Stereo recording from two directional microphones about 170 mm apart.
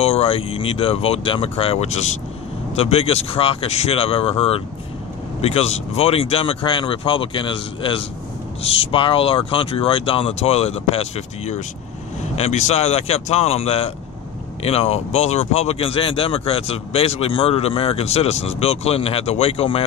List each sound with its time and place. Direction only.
0.0 s speech: 35° left (ahead or behind)